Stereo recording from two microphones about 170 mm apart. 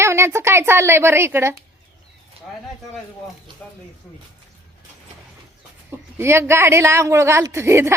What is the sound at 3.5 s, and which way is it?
Speech, 25° right (ahead or behind).